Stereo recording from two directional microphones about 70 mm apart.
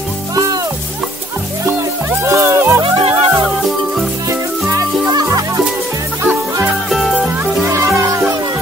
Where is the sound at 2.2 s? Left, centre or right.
Right.